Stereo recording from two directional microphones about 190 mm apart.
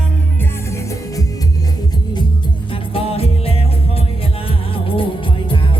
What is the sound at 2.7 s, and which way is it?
Music, 30° left (ahead or behind).